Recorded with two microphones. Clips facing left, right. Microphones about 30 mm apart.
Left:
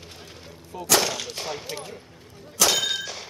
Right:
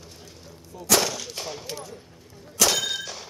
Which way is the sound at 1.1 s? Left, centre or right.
Left.